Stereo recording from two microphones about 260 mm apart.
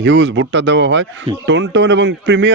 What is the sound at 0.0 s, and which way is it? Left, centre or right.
A man's voice, right.